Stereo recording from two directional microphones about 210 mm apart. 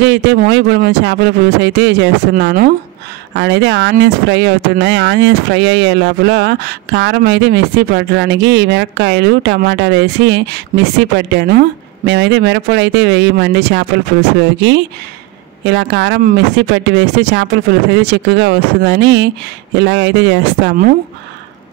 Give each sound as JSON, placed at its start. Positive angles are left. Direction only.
{"t": 0.0, "sound": "speech", "side_deg": -55}
{"t": 15.6, "sound": "speech", "side_deg": -55}